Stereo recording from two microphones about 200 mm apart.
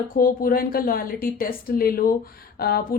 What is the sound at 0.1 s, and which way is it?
Speech, 45° left (ahead or behind).